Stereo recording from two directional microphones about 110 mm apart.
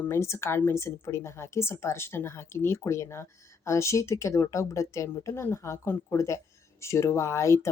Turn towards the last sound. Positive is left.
turn(degrees=25)  # may be behind; listen again after turning